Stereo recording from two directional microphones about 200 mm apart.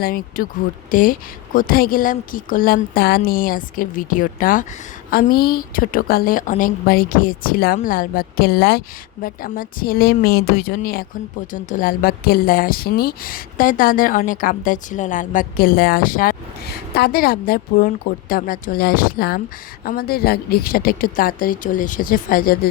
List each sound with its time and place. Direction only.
0.0 s speech: 45° left (ahead or behind)